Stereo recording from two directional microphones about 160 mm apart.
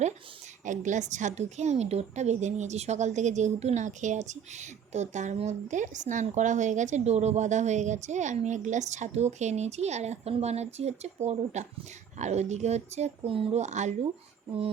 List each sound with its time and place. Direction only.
0.6 s a woman's voice: 50° right (ahead or behind)